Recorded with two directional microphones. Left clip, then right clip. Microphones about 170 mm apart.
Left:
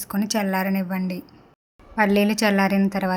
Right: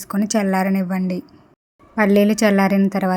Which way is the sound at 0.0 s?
25° right (ahead or behind).